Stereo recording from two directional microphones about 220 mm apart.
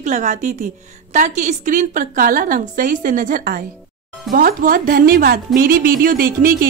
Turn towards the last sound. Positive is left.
turn(degrees=-40)  # may be behind; listen again after turning